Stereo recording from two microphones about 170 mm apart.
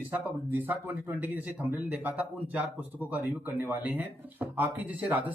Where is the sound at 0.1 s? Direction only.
10° right (ahead or behind).